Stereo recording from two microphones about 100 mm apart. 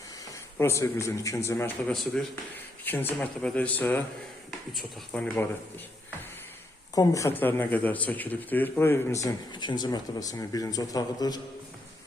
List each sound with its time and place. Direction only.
0.6 s a man's voice: 30° left (ahead or behind)
1.9 s speech: 5° left (ahead or behind)
2.8 s a man's voice: 20° left (ahead or behind)
5.1 s a man's voice: 10° left (ahead or behind)
6.9 s speech: 35° left (ahead or behind)
7.3 s a man's voice: 20° left (ahead or behind)
9.2 s speech: 50° left (ahead or behind)